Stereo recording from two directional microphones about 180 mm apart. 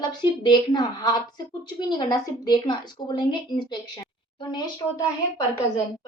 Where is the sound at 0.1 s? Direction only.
25° left (ahead or behind).